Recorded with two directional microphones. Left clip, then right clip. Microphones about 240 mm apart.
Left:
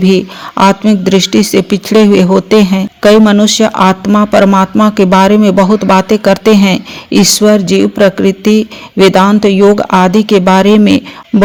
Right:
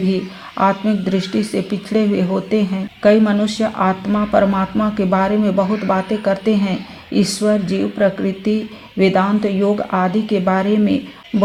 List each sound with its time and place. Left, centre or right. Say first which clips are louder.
0.1 s speech: left 11 dB; left